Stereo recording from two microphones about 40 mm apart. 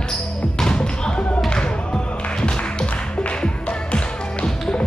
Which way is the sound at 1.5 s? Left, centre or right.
Left.